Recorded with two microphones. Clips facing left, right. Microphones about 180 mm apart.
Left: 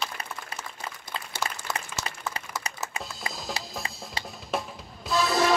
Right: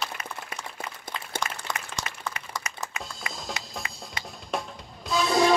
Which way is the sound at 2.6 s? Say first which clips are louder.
Left 1 dB; 30° left (ahead or behind).